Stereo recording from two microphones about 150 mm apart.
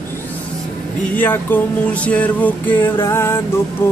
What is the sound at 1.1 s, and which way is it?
Music, 10° left (ahead or behind).